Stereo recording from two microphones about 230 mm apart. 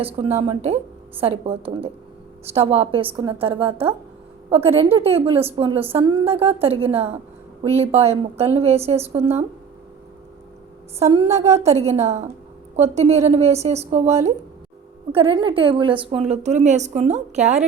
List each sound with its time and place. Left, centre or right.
0.0 s a woman's voice: right
4.6 s a woman's voice: centre
4.9 s a woman's voice: right
11.0 s a woman's voice: right